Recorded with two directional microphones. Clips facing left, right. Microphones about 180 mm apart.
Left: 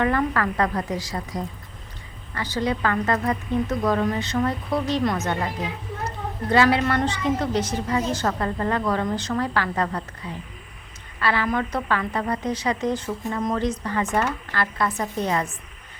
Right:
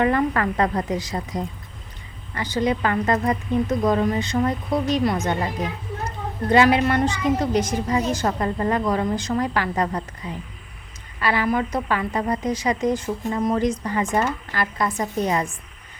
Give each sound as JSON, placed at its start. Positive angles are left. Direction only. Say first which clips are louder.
{"t": 0.0, "sound": "a woman's voice", "louder": "right 2 dB", "side_deg": -20}